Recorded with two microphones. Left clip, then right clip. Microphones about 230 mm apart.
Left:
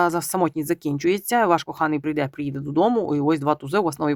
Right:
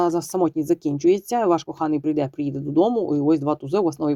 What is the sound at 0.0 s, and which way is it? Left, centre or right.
Speech, left.